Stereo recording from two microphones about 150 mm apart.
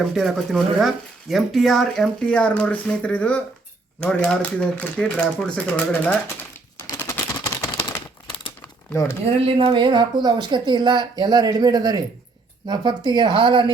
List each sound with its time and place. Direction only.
0.1 s speech: centre (ahead or behind)
6.7 s a sound: 15° left (ahead or behind)
8.9 s speech: 15° left (ahead or behind)
9.2 s speech: 40° right (ahead or behind)